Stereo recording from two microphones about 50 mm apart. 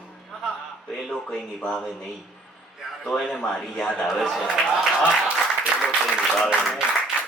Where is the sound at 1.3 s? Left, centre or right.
Centre.